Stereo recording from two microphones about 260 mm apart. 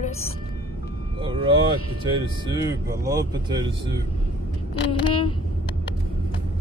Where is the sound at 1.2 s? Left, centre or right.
Centre.